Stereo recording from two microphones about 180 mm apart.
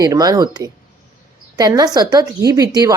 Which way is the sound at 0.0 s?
20° right (ahead or behind).